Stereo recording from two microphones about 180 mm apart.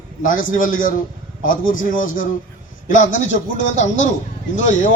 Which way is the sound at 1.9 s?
50° left (ahead or behind).